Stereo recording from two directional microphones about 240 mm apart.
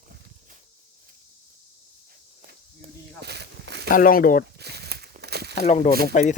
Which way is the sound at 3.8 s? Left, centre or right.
Left.